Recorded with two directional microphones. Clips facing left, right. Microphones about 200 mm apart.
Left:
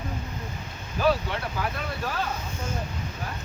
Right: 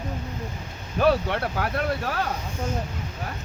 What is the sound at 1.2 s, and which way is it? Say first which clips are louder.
Speech: right 4 dB; 65° right (ahead or behind).